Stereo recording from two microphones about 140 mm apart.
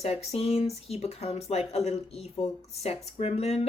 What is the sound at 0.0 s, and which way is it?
Speech, 50° left (ahead or behind).